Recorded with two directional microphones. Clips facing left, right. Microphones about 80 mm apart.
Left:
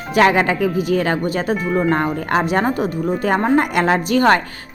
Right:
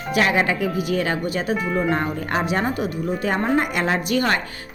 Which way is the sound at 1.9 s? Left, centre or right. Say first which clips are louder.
Left 5 dB; left.